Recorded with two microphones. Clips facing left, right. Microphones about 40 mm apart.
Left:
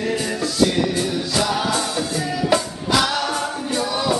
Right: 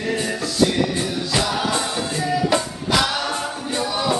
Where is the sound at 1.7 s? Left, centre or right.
Centre.